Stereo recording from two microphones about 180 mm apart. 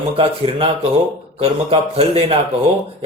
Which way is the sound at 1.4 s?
30° right (ahead or behind).